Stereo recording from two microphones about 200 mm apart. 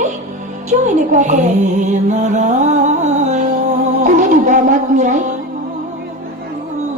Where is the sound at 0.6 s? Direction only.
35° right (ahead or behind).